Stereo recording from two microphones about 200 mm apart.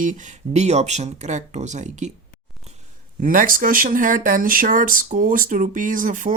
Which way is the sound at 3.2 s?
45° right (ahead or behind).